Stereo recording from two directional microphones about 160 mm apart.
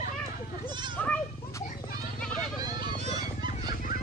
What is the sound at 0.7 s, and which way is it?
Goat, 30° right (ahead or behind).